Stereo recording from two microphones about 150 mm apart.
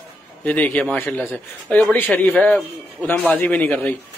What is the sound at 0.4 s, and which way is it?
A man's voice, 10° left (ahead or behind).